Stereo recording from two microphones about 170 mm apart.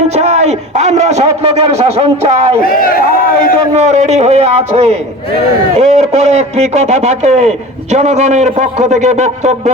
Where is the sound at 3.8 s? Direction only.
40° right (ahead or behind).